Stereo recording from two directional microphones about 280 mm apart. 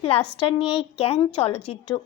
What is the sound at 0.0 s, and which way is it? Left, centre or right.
A woman's voice, centre.